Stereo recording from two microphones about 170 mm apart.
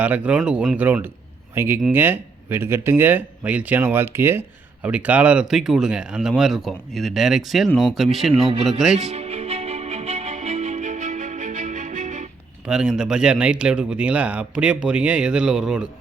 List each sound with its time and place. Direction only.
0.0 s speech: 10° right (ahead or behind)
9.0 s music: 40° right (ahead or behind)
12.6 s speech: 5° right (ahead or behind)